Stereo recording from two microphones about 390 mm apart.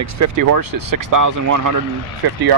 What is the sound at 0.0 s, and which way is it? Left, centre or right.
Speech, right.